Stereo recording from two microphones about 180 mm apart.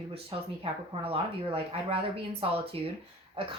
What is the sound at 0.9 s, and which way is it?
Speech, 35° right (ahead or behind).